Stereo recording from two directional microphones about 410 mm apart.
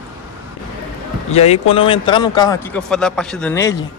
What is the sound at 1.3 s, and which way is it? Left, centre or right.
A man's voice, centre.